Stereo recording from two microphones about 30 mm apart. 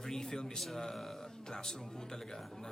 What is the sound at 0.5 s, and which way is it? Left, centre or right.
A man's voice, centre.